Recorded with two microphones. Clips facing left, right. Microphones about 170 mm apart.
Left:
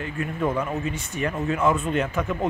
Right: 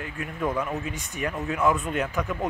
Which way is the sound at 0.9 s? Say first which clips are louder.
Left 3 dB; 15° right (ahead or behind).